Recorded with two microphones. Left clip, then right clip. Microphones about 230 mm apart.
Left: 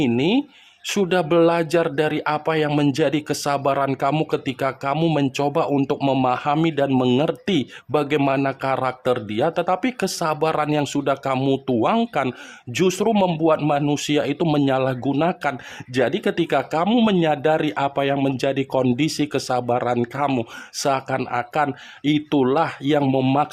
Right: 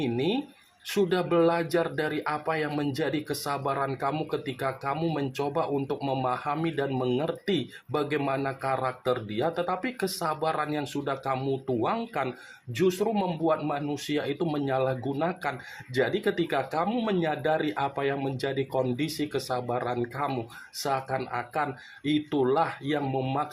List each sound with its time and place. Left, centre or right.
0.0 s speech: left